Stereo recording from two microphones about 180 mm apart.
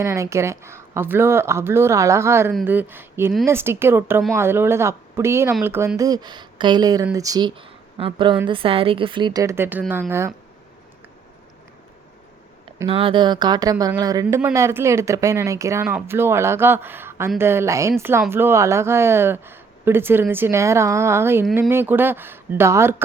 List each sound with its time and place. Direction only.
0.0 s speech: 15° right (ahead or behind)
12.9 s speech: 30° right (ahead or behind); by 23.0 s 15° right (ahead or behind)